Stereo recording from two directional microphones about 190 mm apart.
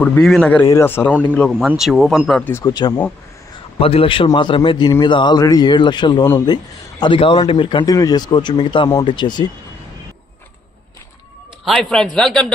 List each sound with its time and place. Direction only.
0.0 s a man's voice: 5° left (ahead or behind); by 3.0 s 20° left (ahead or behind)
3.8 s speech: 30° left (ahead or behind)
11.6 s speech: centre (ahead or behind)